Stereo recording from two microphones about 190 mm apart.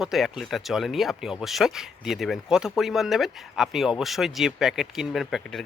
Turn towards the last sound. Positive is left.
turn(degrees=0)  # may be behind; listen again after turning